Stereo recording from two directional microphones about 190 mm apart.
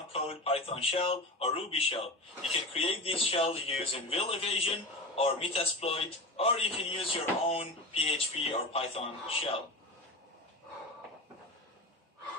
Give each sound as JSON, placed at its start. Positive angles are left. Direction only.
{"t": 0.1, "sound": "a man's voice", "side_deg": 30}